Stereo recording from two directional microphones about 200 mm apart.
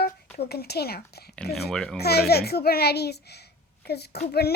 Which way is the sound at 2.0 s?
55° left (ahead or behind).